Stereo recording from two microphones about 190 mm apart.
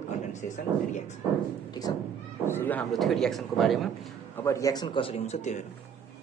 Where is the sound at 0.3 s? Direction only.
40° left (ahead or behind).